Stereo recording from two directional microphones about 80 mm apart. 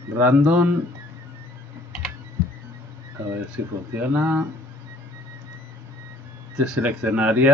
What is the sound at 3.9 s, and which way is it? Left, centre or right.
Speech, right.